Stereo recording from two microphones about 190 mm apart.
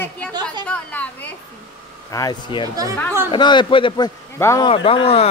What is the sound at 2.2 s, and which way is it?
Speech, 20° left (ahead or behind).